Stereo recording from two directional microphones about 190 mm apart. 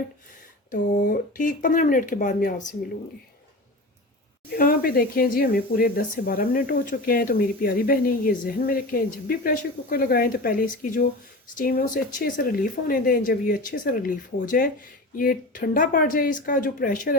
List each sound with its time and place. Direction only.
0.7 s speech: 45° left (ahead or behind)
4.4 s speech: 50° left (ahead or behind)